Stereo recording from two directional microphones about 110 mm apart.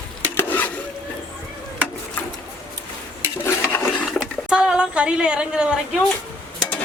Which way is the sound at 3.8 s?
Centre (ahead or behind).